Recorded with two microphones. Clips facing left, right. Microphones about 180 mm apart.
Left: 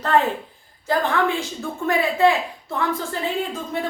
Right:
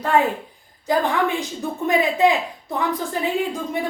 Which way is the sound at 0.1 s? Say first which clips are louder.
Even; 10° right (ahead or behind).